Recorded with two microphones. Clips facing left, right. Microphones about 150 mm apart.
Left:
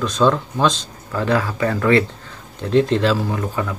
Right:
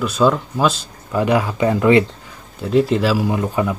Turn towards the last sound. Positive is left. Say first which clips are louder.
# right 4 dB
turn(degrees=-15)  # may be behind; listen again after turning